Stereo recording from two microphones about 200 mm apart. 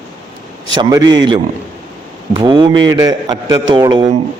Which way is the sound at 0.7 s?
20° right (ahead or behind).